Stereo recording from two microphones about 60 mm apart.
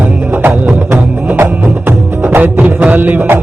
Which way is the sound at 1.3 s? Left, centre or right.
Right.